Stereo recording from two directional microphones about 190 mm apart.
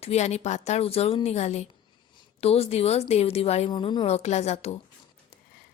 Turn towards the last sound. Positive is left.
turn(degrees=35)  # may be behind; listen again after turning